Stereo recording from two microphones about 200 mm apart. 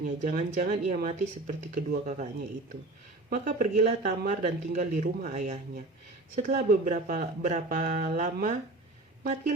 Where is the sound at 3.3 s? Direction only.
40° right (ahead or behind).